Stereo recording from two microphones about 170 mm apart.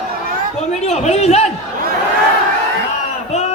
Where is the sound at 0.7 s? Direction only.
40° left (ahead or behind).